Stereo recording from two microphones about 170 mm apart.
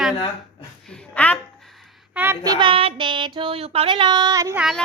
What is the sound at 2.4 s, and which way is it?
Child singing, 25° right (ahead or behind).